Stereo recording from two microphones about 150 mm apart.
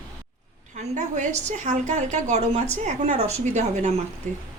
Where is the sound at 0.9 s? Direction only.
55° right (ahead or behind).